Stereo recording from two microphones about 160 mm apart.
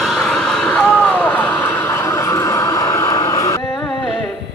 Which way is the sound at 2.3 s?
20° left (ahead or behind).